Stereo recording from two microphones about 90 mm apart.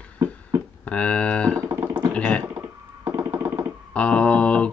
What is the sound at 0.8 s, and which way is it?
Speech, 15° left (ahead or behind).